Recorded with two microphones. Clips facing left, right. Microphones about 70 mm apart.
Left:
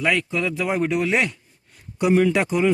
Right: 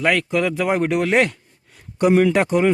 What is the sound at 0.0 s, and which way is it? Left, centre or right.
Speech, right.